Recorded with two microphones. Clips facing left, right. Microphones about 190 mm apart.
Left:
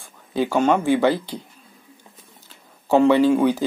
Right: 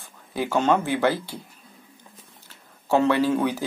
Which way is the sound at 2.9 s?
15° left (ahead or behind).